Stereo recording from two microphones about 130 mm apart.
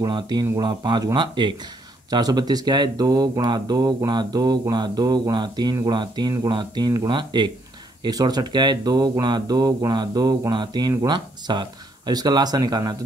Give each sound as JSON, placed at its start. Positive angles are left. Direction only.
{"t": 0.0, "sound": "speech", "side_deg": -30}